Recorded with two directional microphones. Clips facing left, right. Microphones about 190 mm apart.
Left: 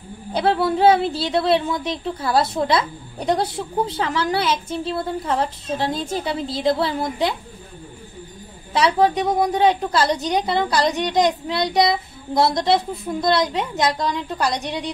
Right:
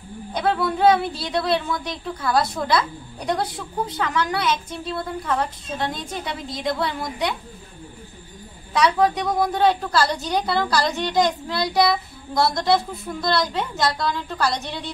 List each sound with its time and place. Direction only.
0.3 s a woman's voice: 30° left (ahead or behind)
8.7 s a woman's voice: 25° left (ahead or behind)